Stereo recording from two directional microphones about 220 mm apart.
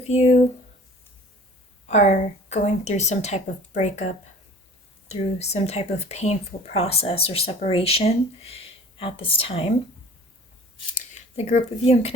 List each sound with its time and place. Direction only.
0.0 s speech: 30° left (ahead or behind)
1.9 s a woman's voice: 30° left (ahead or behind)
10.9 s speech: 30° left (ahead or behind)